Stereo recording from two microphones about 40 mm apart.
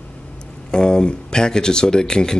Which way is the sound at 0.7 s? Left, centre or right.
Centre.